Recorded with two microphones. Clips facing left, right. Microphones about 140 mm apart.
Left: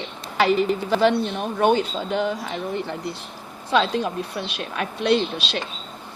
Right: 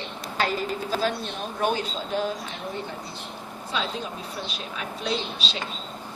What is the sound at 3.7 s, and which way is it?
A woman's voice, 75° left (ahead or behind).